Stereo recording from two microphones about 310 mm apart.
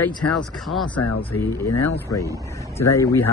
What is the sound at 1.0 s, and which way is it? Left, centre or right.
Speech, left.